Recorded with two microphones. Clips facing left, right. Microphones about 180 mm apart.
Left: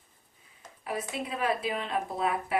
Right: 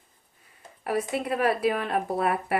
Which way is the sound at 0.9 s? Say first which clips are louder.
Right 7 dB; 65° right (ahead or behind).